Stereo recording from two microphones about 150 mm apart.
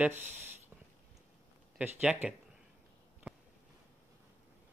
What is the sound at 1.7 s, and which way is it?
Speech, 10° right (ahead or behind).